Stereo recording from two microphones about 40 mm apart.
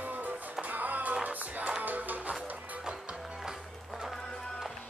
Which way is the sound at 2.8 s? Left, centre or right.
Right.